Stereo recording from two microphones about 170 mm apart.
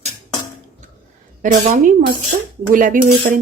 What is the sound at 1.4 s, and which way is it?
Speech, 50° right (ahead or behind).